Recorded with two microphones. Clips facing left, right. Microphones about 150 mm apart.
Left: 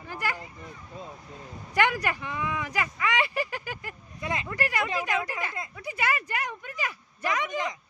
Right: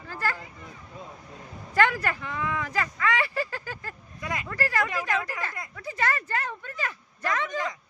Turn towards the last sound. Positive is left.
turn(degrees=20)  # may be behind; listen again after turning